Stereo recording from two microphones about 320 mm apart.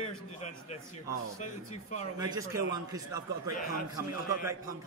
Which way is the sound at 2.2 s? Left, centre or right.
Centre.